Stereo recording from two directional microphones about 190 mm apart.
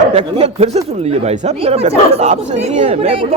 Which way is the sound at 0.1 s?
35° right (ahead or behind).